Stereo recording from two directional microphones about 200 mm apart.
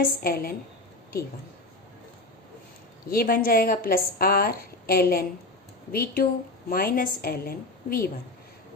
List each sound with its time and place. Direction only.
0.0 s a woman's voice: 50° left (ahead or behind)
3.1 s a woman's voice: 45° left (ahead or behind)